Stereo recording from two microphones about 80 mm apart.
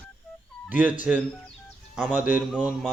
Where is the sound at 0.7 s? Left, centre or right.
Centre.